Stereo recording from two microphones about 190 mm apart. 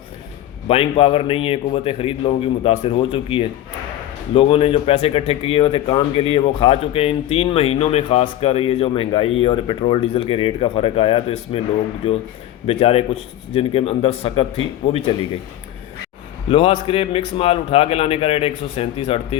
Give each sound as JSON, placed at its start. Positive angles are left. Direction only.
{"t": 0.7, "sound": "a man's voice", "side_deg": 30}
{"t": 16.5, "sound": "a man's voice", "side_deg": 30}